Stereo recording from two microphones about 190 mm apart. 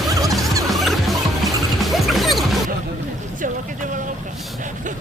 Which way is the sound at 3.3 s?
45° right (ahead or behind).